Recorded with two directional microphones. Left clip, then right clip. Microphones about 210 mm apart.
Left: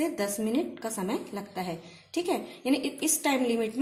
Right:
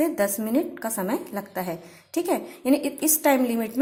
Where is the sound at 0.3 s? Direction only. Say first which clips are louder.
Right 4 dB; 25° right (ahead or behind).